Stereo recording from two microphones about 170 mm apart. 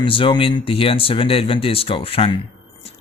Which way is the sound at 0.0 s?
30° left (ahead or behind).